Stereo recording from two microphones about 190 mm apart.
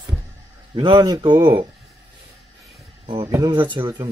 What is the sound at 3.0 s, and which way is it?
Speech, 25° right (ahead or behind).